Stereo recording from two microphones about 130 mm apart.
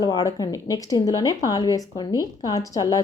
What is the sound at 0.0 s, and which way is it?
Speech, 30° left (ahead or behind).